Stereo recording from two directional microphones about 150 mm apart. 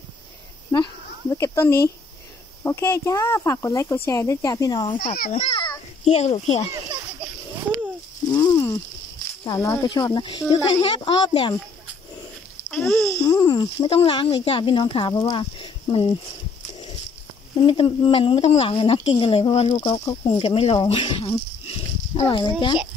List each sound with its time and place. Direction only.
0.7 s a sound: 25° left (ahead or behind)
1.3 s speech: 20° left (ahead or behind)
5.3 s a child's voice: 40° left (ahead or behind)
8.3 s a sound: 25° left (ahead or behind)
9.4 s speech: 20° left (ahead or behind)
10.8 s a woman's voice: 40° left (ahead or behind)
12.7 s speech: centre (ahead or behind)
13.2 s a woman's voice: 25° left (ahead or behind)
17.6 s a woman's voice: 35° left (ahead or behind)
20.3 s a sound: 40° left (ahead or behind)
22.3 s a woman's voice: 30° left (ahead or behind)